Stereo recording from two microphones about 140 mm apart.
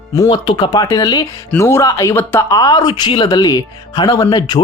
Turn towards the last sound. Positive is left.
turn(degrees=30)  # may be behind; listen again after turning